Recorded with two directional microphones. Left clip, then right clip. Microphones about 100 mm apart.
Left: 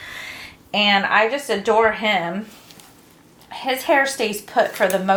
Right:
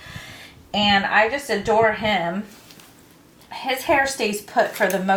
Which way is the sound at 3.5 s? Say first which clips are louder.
Left 2 dB; 30° left (ahead or behind).